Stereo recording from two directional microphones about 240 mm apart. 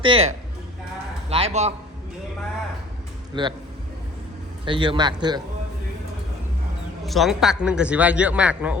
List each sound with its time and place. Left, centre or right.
0.0 s speech: right
3.3 s speech: centre
4.6 s speech: right
7.0 s speech: centre